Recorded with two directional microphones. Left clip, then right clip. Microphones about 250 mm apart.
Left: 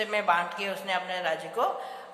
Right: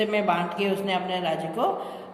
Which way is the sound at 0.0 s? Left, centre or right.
Centre.